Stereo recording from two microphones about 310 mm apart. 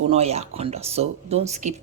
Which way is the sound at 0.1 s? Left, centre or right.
Centre.